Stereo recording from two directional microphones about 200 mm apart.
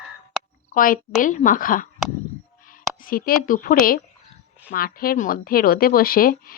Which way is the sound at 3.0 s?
45° left (ahead or behind).